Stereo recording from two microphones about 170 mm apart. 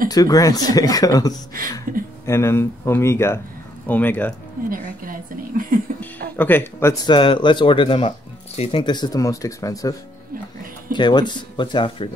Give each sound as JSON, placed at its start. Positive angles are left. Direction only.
{"t": 0.1, "sound": "speech", "side_deg": 20}
{"t": 1.9, "sound": "a woman's voice", "side_deg": -55}
{"t": 2.2, "sound": "speech", "side_deg": 15}
{"t": 4.6, "sound": "a woman's voice", "side_deg": -55}
{"t": 5.9, "sound": "music", "side_deg": 10}
{"t": 7.1, "sound": "speech", "side_deg": 30}